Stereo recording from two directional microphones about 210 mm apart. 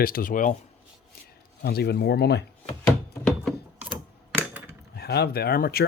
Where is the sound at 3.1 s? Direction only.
5° left (ahead or behind).